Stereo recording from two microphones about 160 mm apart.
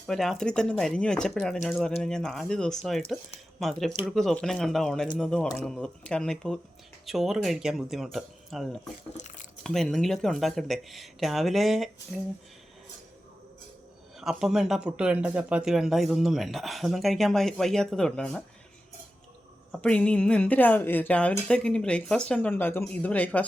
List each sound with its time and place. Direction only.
0.1 s speech: centre (ahead or behind)
9.1 s a sound: 50° left (ahead or behind)
9.6 s speech: 5° left (ahead or behind)
14.2 s speech: centre (ahead or behind)
19.7 s speech: 5° left (ahead or behind)